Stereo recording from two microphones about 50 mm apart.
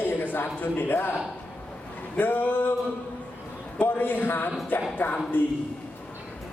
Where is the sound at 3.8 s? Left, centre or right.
Left.